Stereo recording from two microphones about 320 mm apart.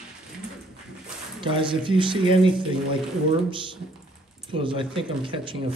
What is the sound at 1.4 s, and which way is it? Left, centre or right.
Speech, centre.